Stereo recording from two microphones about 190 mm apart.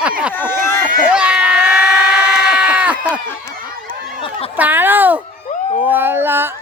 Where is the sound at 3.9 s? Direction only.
25° left (ahead or behind).